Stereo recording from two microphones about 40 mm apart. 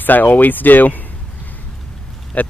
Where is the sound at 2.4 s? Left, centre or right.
Left.